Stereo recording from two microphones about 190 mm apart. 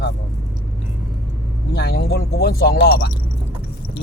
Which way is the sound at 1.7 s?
60° left (ahead or behind).